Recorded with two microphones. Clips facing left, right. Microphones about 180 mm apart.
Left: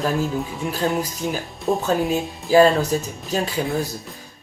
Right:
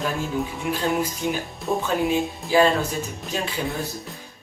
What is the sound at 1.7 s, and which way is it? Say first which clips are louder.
Speech: left 3 dB; 25° left (ahead or behind).